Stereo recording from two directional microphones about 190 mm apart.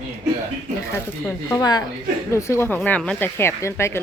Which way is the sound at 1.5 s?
20° left (ahead or behind).